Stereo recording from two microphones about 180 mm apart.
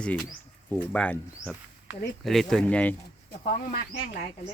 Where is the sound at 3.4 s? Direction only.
55° left (ahead or behind).